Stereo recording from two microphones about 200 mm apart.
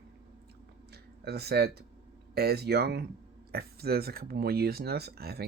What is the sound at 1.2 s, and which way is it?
Speech, 55° right (ahead or behind).